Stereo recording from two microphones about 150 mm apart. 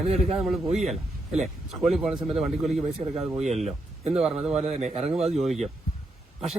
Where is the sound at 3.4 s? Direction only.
50° right (ahead or behind).